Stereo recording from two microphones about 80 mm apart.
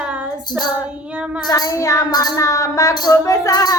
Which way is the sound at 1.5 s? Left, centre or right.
Left.